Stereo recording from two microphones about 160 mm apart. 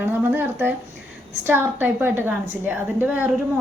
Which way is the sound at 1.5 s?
10° right (ahead or behind).